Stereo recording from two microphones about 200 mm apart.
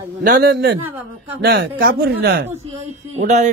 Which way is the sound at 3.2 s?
35° right (ahead or behind).